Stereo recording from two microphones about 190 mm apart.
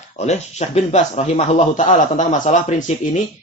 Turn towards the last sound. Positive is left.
turn(degrees=40)  # may be behind; listen again after turning